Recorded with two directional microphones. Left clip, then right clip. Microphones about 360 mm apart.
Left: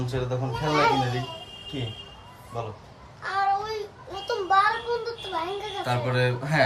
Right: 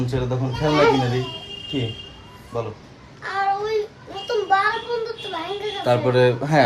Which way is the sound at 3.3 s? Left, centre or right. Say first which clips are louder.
Right 3 dB; centre.